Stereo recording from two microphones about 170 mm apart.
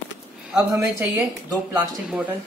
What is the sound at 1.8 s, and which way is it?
Speech, 10° right (ahead or behind).